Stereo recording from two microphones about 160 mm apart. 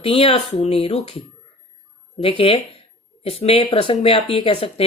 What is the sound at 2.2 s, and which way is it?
Speech, 35° left (ahead or behind).